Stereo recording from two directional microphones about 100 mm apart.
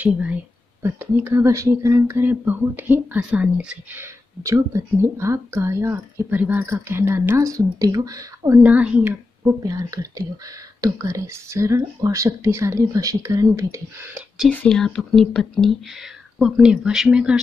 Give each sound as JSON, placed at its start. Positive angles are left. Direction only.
{"t": 0.0, "sound": "a woman's voice", "side_deg": -15}
{"t": 0.8, "sound": "speech", "side_deg": -25}
{"t": 8.6, "sound": "a woman's voice", "side_deg": -10}
{"t": 9.6, "sound": "speech", "side_deg": -35}
{"t": 14.7, "sound": "speech", "side_deg": 5}